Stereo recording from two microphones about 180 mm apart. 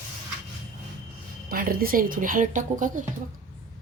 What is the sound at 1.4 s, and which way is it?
Speech, 55° right (ahead or behind).